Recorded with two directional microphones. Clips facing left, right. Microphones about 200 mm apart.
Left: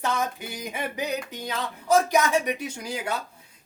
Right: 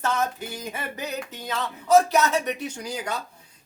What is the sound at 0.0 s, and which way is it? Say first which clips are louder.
Speech: right 1 dB; 15° left (ahead or behind).